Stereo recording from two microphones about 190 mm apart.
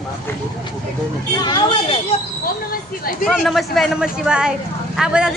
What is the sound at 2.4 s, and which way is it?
Speech, 50° left (ahead or behind).